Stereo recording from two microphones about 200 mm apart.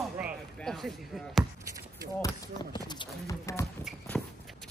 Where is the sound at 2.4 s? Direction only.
20° left (ahead or behind).